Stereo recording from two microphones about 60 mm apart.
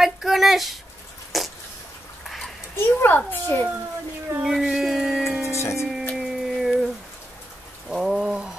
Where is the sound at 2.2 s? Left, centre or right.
Centre.